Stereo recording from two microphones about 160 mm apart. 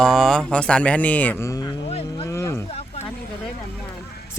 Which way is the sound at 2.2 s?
15° left (ahead or behind).